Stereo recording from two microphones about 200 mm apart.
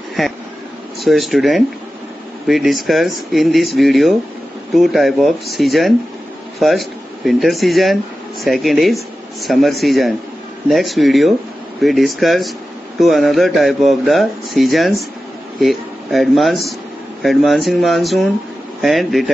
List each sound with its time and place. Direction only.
0.2 s speech: centre (ahead or behind)